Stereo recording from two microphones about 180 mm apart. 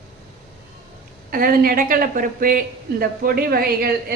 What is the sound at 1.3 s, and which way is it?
A woman's voice, 50° right (ahead or behind).